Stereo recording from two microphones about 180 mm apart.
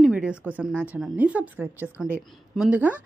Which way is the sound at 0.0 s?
5° right (ahead or behind).